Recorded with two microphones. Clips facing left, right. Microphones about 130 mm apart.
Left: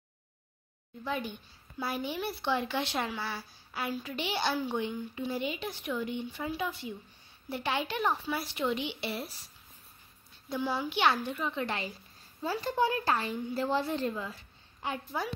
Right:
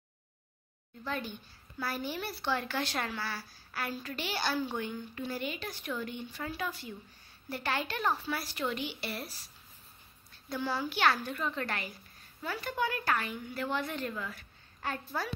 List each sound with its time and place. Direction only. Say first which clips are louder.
1.0 s speech: left 2 dB; 15° left (ahead or behind)
10.5 s speech: left 2 dB; 15° left (ahead or behind)
12.4 s a woman's voice: left 5 dB; 30° left (ahead or behind)